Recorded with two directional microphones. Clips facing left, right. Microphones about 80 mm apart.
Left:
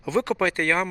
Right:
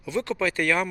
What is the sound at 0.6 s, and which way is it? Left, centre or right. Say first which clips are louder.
Speech: right 2 dB; left.